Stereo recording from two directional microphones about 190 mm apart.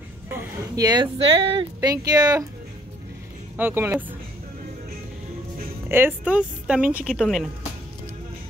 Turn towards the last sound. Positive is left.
turn(degrees=0)  # may be behind; listen again after turning